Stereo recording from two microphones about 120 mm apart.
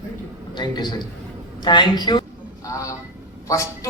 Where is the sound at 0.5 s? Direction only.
35° left (ahead or behind).